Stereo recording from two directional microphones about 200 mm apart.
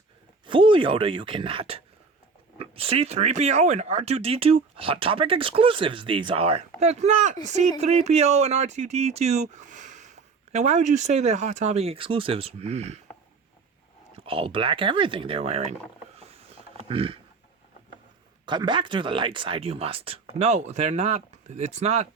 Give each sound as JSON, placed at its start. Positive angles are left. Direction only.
{"t": 0.4, "sound": "speech", "side_deg": -25}
{"t": 14.2, "sound": "speech", "side_deg": -25}
{"t": 16.1, "sound": "a sound", "side_deg": -30}
{"t": 18.4, "sound": "speech", "side_deg": -25}